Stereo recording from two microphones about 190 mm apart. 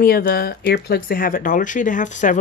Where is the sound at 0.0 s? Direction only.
50° left (ahead or behind).